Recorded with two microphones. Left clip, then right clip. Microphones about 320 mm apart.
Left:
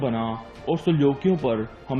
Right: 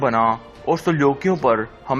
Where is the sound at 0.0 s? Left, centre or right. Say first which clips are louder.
Right 10 dB; right.